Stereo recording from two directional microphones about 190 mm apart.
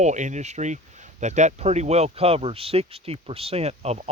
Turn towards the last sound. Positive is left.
turn(degrees=-35)  # may be behind; listen again after turning